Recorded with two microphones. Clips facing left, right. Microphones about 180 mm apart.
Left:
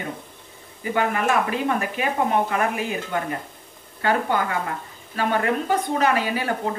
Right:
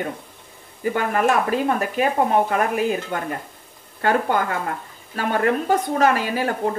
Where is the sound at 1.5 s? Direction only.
45° right (ahead or behind).